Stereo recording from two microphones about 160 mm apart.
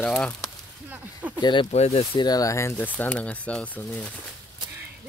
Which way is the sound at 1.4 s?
30° left (ahead or behind).